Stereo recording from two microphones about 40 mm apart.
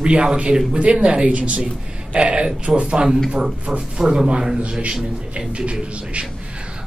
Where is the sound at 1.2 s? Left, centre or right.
Right; by 4.6 s centre.